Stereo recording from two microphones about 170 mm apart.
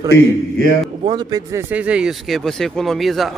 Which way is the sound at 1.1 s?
20° right (ahead or behind).